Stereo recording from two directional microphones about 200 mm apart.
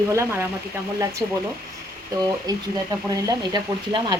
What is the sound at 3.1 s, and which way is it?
Speech, 20° right (ahead or behind).